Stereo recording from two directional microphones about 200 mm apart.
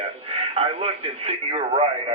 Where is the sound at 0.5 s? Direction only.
30° right (ahead or behind).